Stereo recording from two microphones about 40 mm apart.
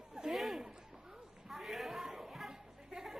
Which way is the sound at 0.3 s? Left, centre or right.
Centre.